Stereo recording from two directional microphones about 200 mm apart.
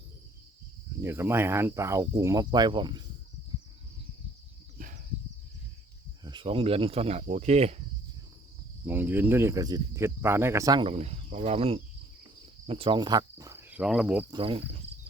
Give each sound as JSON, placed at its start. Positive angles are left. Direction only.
{"t": 1.0, "sound": "speech", "side_deg": -10}
{"t": 4.8, "sound": "a sound", "side_deg": -45}
{"t": 6.2, "sound": "speech", "side_deg": -25}
{"t": 8.9, "sound": "speech", "side_deg": -10}
{"t": 12.6, "sound": "cricket", "side_deg": -25}
{"t": 14.3, "sound": "speech", "side_deg": -25}